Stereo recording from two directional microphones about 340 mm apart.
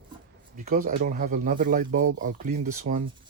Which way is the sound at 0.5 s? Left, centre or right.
Right.